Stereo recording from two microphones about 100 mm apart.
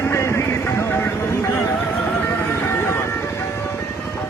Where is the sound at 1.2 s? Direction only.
30° left (ahead or behind).